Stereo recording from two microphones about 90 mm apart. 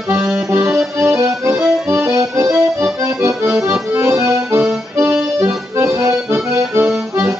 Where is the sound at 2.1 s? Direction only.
35° right (ahead or behind).